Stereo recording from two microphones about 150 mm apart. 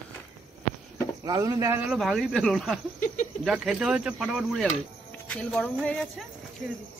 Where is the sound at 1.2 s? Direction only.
25° right (ahead or behind).